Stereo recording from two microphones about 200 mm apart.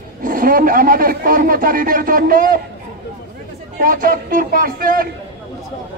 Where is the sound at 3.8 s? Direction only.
45° right (ahead or behind).